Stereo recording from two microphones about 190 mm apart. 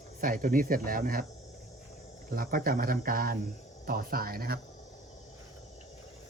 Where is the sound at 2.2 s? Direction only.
50° right (ahead or behind).